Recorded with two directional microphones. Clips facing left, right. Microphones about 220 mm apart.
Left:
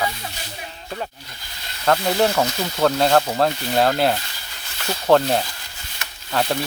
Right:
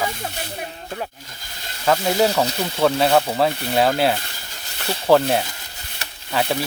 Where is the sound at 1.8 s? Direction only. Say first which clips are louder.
Even; 5° right (ahead or behind).